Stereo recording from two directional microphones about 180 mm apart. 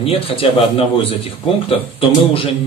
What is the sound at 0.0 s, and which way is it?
A man's voice, 30° left (ahead or behind).